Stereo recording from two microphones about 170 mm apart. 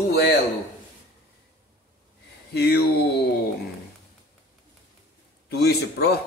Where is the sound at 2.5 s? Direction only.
65° left (ahead or behind).